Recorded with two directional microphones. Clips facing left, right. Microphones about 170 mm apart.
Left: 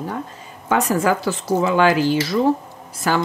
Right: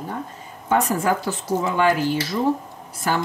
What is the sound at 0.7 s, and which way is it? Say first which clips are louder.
Speech: left 2 dB; 90° left.